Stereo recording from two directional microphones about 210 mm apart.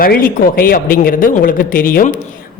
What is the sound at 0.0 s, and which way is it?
A man's voice, 45° left (ahead or behind).